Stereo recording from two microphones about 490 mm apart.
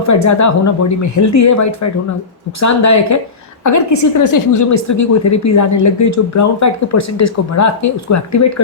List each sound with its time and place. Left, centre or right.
0.0 s a woman's voice: left